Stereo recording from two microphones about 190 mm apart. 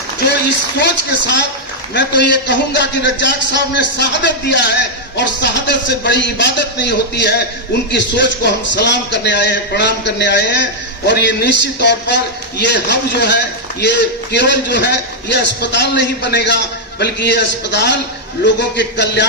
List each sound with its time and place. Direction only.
0.8 s a man's voice: 65° left (ahead or behind)